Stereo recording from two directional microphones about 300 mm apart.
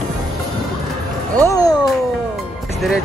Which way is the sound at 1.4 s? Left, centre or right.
Centre.